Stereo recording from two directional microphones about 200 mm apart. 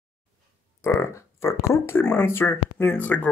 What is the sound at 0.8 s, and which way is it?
Speech, 15° left (ahead or behind).